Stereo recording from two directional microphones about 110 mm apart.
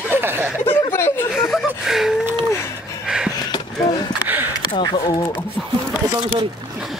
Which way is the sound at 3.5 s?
40° left (ahead or behind).